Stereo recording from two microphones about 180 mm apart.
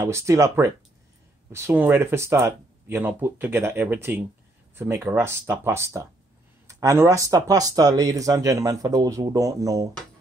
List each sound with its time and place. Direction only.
0.0 s speech: 15° right (ahead or behind)